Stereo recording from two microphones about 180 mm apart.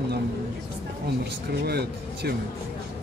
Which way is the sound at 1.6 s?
60° right (ahead or behind).